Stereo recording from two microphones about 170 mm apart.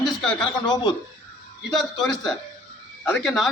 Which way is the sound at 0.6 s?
25° left (ahead or behind).